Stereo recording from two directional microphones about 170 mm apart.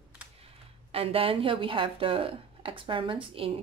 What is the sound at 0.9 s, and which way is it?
Speech, 35° right (ahead or behind).